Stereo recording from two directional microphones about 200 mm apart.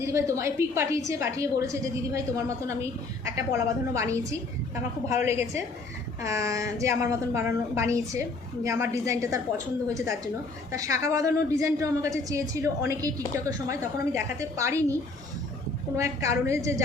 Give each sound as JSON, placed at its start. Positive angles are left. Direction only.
{"t": 0.0, "sound": "a woman's voice", "side_deg": -15}
{"t": 10.7, "sound": "a woman's voice", "side_deg": -15}
{"t": 16.0, "sound": "a woman's voice", "side_deg": -15}